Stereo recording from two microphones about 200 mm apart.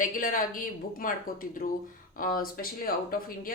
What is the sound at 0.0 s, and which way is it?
Speech, 45° left (ahead or behind).